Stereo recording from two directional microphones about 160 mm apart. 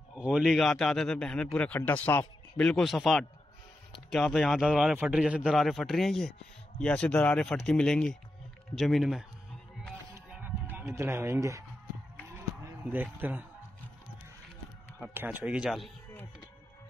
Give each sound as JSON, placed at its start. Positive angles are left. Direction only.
{"t": 0.2, "sound": "a man's voice", "side_deg": -5}
{"t": 10.3, "sound": "music", "side_deg": -10}
{"t": 12.6, "sound": "speech", "side_deg": -10}
{"t": 15.0, "sound": "speech", "side_deg": -10}